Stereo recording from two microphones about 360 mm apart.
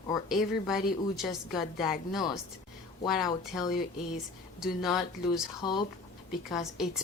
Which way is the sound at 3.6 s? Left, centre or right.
Centre.